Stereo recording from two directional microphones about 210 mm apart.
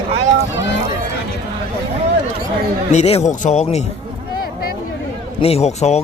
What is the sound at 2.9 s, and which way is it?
Speech, 30° left (ahead or behind).